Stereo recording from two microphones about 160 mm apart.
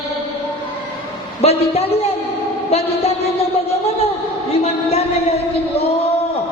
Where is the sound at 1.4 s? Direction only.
40° left (ahead or behind).